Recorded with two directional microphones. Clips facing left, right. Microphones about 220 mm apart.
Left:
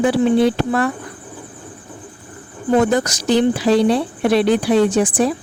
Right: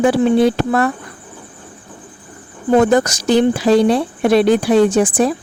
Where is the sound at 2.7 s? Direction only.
50° right (ahead or behind).